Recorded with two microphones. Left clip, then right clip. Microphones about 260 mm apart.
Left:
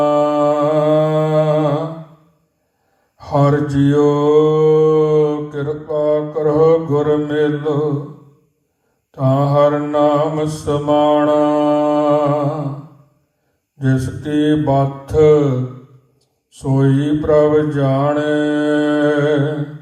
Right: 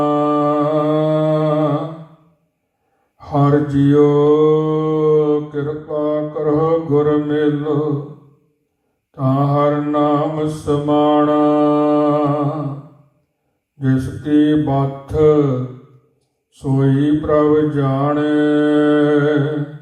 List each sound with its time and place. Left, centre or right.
0.0 s mantra: left
3.2 s mantra: left
9.1 s mantra: left
13.7 s mantra: left
16.5 s mantra: left